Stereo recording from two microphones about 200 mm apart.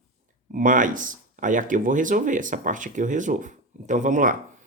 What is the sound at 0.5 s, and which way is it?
Speech, 40° right (ahead or behind).